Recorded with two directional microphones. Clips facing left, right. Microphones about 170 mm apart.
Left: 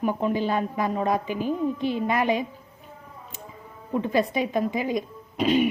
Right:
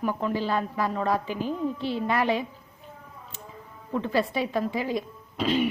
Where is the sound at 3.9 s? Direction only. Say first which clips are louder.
Left 2 dB; 15° left (ahead or behind).